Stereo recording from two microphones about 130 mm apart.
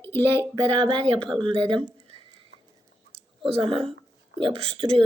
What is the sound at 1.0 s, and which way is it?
Speech, 5° left (ahead or behind).